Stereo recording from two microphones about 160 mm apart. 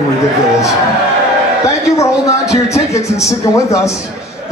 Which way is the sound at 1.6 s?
20° left (ahead or behind).